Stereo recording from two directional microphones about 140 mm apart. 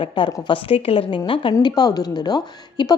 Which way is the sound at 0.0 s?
35° left (ahead or behind).